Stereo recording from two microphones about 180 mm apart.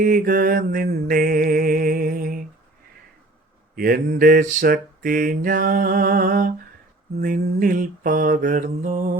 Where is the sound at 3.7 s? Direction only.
55° right (ahead or behind).